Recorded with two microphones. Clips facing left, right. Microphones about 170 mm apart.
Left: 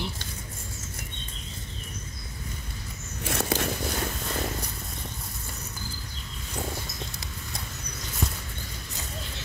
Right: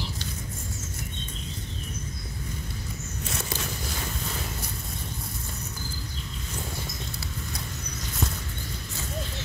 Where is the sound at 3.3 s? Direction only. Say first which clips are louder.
Left 8 dB; 60° left (ahead or behind).